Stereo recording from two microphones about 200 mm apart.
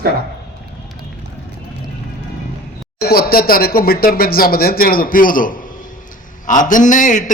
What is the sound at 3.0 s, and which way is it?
Speech, 50° left (ahead or behind).